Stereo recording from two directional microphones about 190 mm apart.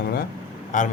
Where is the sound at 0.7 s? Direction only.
40° left (ahead or behind).